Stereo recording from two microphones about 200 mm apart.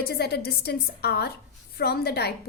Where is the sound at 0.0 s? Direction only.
50° left (ahead or behind).